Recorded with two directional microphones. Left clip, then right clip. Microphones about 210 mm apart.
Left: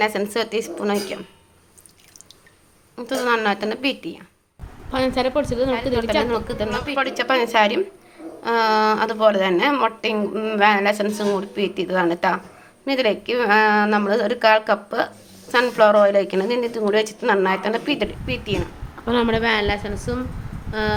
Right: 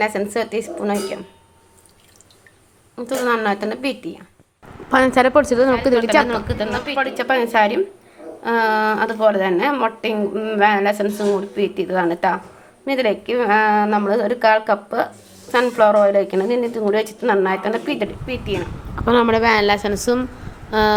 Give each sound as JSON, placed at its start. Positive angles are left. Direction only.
{"t": 0.0, "sound": "a woman's voice", "side_deg": 0}
{"t": 2.9, "sound": "a woman's voice", "side_deg": -5}
{"t": 4.9, "sound": "a woman's voice", "side_deg": -25}
{"t": 6.2, "sound": "a woman's voice", "side_deg": 5}
{"t": 19.0, "sound": "a woman's voice", "side_deg": -15}
{"t": 19.7, "sound": "a woman's voice", "side_deg": -35}
{"t": 20.7, "sound": "a sound", "side_deg": -25}